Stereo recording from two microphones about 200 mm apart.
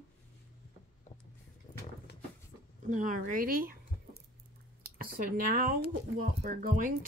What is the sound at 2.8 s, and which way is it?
Speech, 40° right (ahead or behind).